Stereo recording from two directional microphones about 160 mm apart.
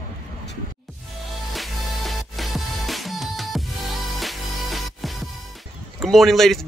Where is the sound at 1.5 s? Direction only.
Centre (ahead or behind).